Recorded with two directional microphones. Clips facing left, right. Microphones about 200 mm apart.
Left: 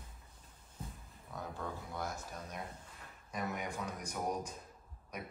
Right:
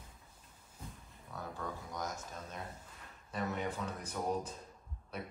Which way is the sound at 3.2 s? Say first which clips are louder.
Right 2 dB; 10° left (ahead or behind).